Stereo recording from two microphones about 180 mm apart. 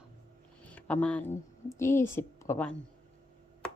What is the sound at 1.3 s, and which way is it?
A woman's voice, 15° left (ahead or behind).